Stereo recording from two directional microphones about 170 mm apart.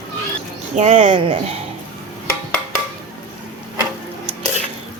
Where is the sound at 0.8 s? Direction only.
35° right (ahead or behind).